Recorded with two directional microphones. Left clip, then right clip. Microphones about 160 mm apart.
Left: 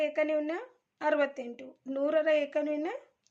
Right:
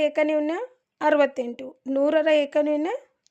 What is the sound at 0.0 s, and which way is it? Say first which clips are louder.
A woman's voice: right 7 dB; 60° right (ahead or behind).